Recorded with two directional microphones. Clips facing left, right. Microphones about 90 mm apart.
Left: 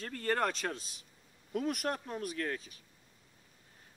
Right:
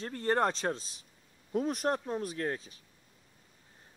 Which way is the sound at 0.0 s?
25° right (ahead or behind).